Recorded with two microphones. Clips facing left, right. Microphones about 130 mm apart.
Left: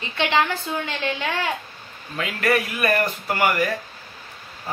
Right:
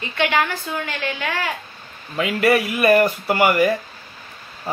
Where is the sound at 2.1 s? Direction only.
10° right (ahead or behind).